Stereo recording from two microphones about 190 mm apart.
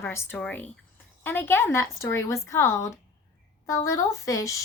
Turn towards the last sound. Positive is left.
turn(degrees=15)  # may be behind; listen again after turning